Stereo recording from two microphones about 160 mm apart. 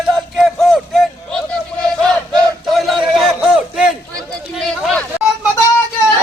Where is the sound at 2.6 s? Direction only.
Centre (ahead or behind).